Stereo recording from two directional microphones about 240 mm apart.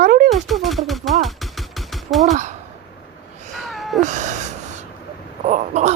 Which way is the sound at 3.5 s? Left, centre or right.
Centre.